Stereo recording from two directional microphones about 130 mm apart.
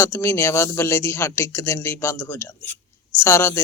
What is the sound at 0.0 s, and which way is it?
A man's voice, 20° left (ahead or behind).